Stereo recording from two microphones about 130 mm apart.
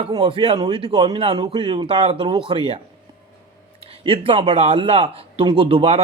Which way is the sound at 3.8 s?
45° right (ahead or behind).